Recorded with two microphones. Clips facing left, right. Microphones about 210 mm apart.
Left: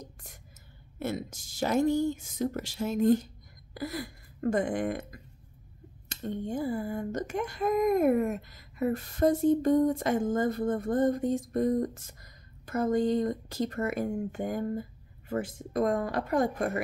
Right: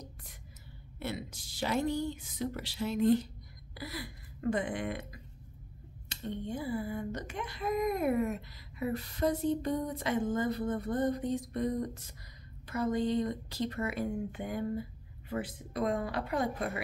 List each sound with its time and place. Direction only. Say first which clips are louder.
0.0 s whispering: left 3 dB; 45° left (ahead or behind)
0.9 s speech: left 5 dB; 45° left (ahead or behind)